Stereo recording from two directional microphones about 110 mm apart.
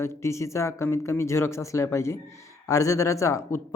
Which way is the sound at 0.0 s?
25° left (ahead or behind).